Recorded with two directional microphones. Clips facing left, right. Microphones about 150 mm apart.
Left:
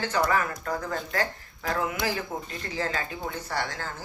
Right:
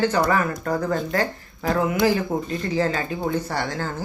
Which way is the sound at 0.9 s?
30° right (ahead or behind).